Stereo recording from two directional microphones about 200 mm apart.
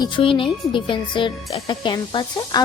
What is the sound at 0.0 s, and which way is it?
Speech, 25° left (ahead or behind).